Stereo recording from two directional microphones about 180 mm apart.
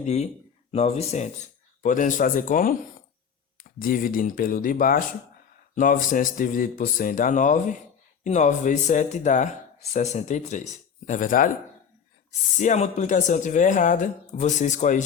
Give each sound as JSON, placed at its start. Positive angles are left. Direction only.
{"t": 0.0, "sound": "speech", "side_deg": 40}
{"t": 12.5, "sound": "speech", "side_deg": 40}